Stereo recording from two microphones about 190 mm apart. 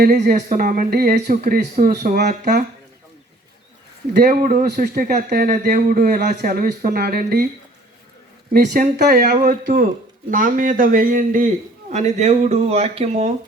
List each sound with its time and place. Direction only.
0.0 s speech: 55° right (ahead or behind)
4.1 s speech: 50° right (ahead or behind)
8.5 s speech: 50° right (ahead or behind); by 13.3 s 35° right (ahead or behind)